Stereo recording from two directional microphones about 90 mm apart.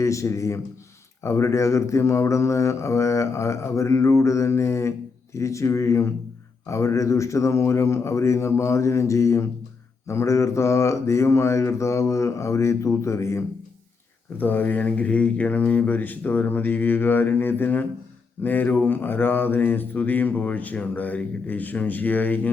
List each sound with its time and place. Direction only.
0.0 s speech: 35° left (ahead or behind)
14.3 s speech: 20° left (ahead or behind)